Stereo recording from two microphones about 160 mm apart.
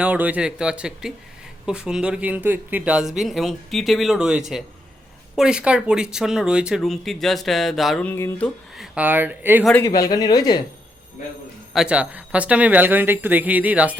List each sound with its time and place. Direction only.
0.0 s speech: 10° right (ahead or behind)
8.0 s music: 15° left (ahead or behind)
9.0 s speech: 10° right (ahead or behind)
9.8 s speech: 20° left (ahead or behind)
11.7 s speech: 5° right (ahead or behind)